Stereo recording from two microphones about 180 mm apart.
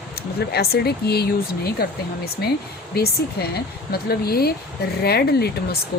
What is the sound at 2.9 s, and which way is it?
Speech, 60° left (ahead or behind).